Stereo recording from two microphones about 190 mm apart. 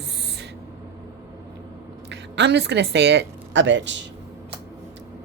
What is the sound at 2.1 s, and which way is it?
A woman's voice, 65° right (ahead or behind).